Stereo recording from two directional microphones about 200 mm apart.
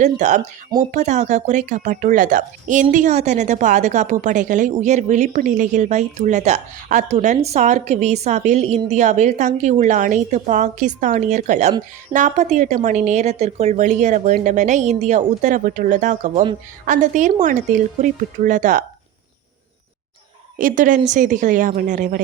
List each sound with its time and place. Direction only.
0.0 s a woman's voice: 35° right (ahead or behind)
20.6 s a woman's voice: 40° right (ahead or behind)